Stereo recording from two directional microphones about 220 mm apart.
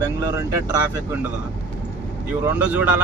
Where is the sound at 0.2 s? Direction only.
15° right (ahead or behind).